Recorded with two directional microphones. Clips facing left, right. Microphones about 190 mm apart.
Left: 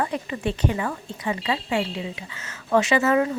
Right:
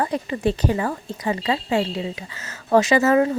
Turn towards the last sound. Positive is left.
turn(degrees=-40)  # may be behind; listen again after turning